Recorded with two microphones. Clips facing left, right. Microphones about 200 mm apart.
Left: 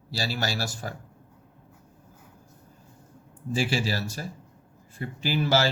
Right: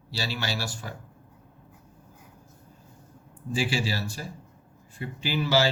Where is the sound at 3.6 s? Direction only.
45° left (ahead or behind).